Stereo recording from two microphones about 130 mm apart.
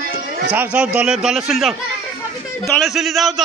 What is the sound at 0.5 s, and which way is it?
Speech, 10° right (ahead or behind).